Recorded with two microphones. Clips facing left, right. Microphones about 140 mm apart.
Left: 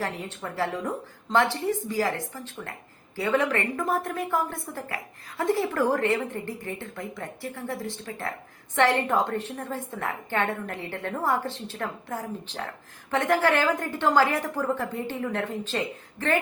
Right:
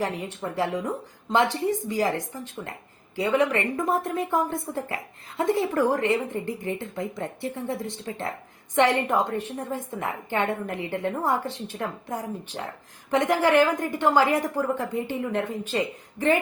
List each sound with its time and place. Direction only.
0.0 s a woman's voice: 15° right (ahead or behind)